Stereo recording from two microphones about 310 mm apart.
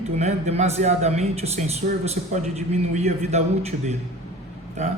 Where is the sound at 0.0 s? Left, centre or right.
Right.